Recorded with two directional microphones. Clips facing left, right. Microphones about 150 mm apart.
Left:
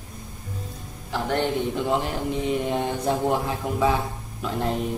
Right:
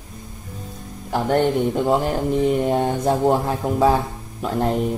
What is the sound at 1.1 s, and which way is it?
Speech, 50° right (ahead or behind).